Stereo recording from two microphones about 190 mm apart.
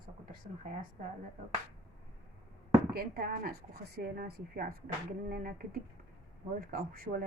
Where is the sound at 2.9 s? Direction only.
55° right (ahead or behind).